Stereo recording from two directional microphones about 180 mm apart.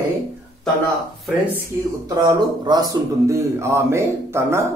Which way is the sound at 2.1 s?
20° right (ahead or behind).